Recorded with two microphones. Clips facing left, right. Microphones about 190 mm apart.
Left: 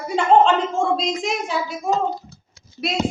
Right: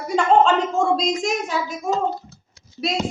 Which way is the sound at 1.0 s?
40° right (ahead or behind).